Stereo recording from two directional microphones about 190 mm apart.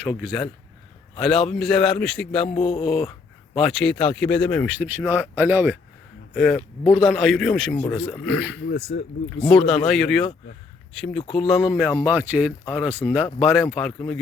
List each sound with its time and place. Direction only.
0.1 s speech: 5° right (ahead or behind)
6.3 s speech: centre (ahead or behind)
8.9 s speech: 70° left (ahead or behind)
9.4 s speech: centre (ahead or behind)